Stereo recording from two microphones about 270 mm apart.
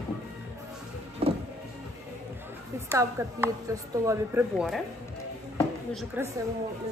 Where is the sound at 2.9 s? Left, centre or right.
Centre.